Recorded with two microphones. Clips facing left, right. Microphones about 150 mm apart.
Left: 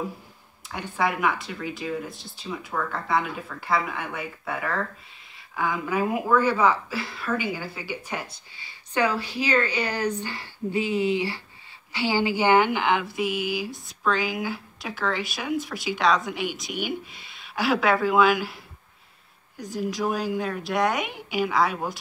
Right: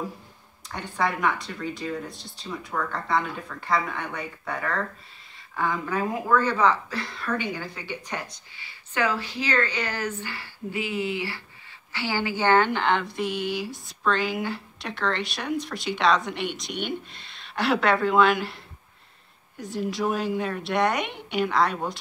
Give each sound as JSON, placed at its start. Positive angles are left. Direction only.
{"t": 0.7, "sound": "speech", "side_deg": 5}